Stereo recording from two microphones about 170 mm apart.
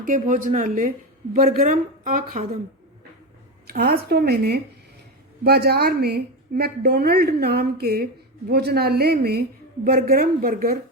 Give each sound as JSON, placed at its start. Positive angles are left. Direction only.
{"t": 0.0, "sound": "a woman's voice", "side_deg": -50}
{"t": 1.5, "sound": "a woman's voice", "side_deg": -45}
{"t": 3.7, "sound": "a woman's voice", "side_deg": -65}
{"t": 9.8, "sound": "a woman's voice", "side_deg": -60}